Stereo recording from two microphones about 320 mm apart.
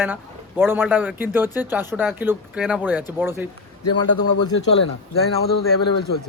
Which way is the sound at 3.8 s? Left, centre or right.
Left.